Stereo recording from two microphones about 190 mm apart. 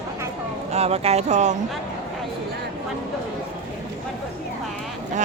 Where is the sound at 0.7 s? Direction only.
35° right (ahead or behind).